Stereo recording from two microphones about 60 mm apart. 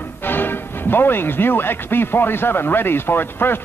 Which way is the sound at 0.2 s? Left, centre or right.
Left.